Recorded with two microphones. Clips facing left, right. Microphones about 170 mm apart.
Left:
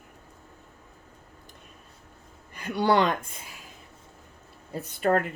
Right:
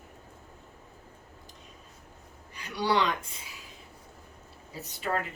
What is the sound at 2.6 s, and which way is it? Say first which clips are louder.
Speech: left 5 dB; 50° left (ahead or behind).